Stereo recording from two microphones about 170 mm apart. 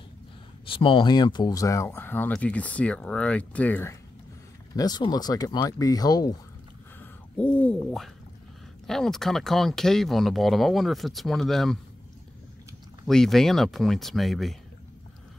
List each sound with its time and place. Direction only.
0.7 s speech: 30° left (ahead or behind); by 3.9 s 10° left (ahead or behind)
4.7 s speech: 25° left (ahead or behind)
7.0 s a sound: 10° left (ahead or behind)
8.8 s speech: centre (ahead or behind)
13.0 s speech: centre (ahead or behind)